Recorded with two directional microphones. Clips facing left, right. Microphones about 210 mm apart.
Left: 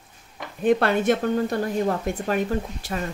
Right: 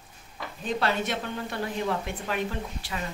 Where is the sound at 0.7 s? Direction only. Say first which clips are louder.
Left 9 dB; 55° left (ahead or behind).